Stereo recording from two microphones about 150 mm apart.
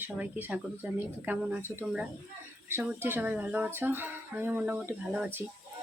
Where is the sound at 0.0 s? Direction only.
10° right (ahead or behind).